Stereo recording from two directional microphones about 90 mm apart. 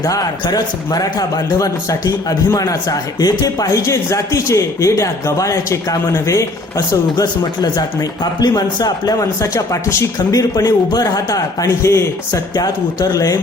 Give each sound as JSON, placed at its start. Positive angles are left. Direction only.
{"t": 0.0, "sound": "a man's voice", "side_deg": 45}
{"t": 12.5, "sound": "speech", "side_deg": 45}